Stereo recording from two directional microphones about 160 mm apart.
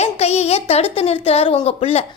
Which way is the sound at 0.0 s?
40° left (ahead or behind).